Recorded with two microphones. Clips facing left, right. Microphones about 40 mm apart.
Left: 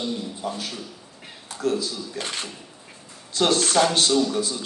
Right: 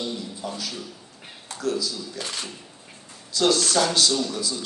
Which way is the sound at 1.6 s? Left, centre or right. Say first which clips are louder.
Left 2 dB; left.